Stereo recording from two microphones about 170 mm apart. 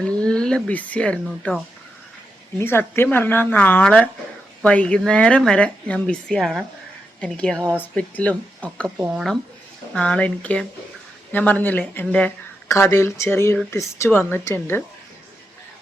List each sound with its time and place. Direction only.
0.0 s speech: 5° left (ahead or behind)
2.6 s speech: 15° left (ahead or behind)
9.0 s speech: 10° right (ahead or behind)
9.9 s speech: 5° left (ahead or behind)